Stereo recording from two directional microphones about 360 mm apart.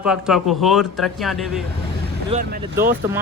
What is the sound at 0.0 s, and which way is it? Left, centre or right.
Speech, centre.